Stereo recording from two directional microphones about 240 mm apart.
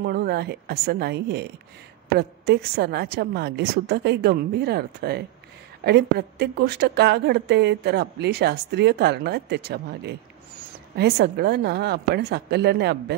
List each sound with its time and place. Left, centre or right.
0.0 s a woman's voice: right